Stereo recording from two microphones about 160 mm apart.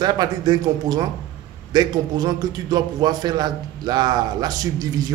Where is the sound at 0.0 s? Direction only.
25° right (ahead or behind).